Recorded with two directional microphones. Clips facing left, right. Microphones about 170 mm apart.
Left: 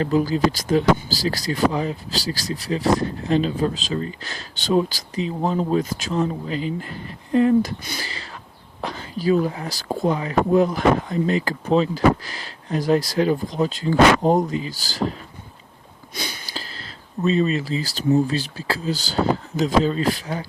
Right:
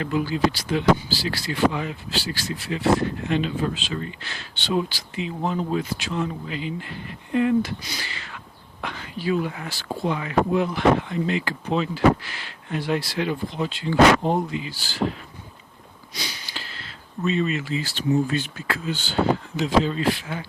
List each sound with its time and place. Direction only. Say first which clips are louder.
0.0 s speech: left 4 dB; 35° left (ahead or behind)
7.9 s a sound: left 3 dB; 35° left (ahead or behind)
8.8 s speech: left 4 dB; 35° left (ahead or behind)
16.1 s sniff: left 4 dB; 50° left (ahead or behind)
17.2 s speech: left 4 dB; 35° left (ahead or behind)